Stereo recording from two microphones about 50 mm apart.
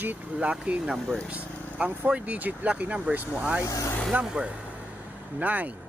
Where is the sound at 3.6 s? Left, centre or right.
Left.